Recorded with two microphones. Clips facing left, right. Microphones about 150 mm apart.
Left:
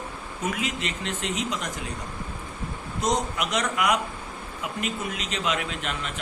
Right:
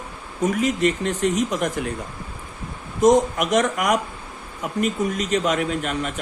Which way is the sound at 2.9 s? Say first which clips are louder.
Right 10 dB; 45° right (ahead or behind).